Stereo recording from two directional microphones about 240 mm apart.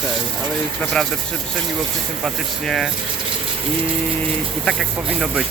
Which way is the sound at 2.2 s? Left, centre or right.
Centre.